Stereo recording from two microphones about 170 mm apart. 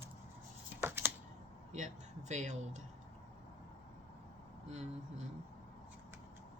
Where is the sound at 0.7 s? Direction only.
15° right (ahead or behind).